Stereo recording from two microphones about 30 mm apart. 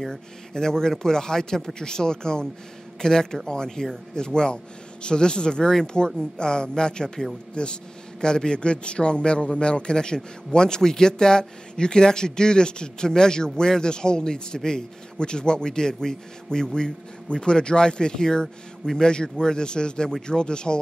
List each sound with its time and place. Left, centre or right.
0.0 s speech: centre
0.6 s a man's voice: left